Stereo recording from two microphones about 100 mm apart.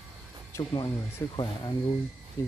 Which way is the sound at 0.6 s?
45° left (ahead or behind).